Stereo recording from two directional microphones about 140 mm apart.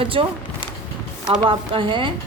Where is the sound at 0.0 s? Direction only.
40° right (ahead or behind).